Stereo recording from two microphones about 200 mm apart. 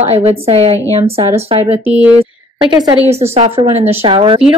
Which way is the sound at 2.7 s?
20° right (ahead or behind).